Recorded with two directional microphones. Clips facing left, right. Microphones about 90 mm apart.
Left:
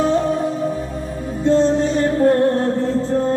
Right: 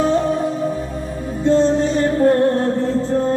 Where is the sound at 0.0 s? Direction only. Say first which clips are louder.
Even; 5° left (ahead or behind).